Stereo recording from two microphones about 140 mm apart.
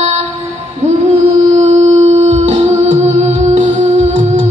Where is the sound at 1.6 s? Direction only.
50° right (ahead or behind).